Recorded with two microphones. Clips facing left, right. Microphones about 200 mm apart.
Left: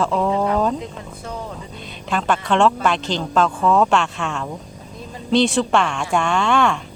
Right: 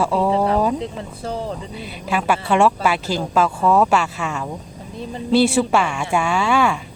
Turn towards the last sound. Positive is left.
turn(degrees=-5)  # may be behind; listen again after turning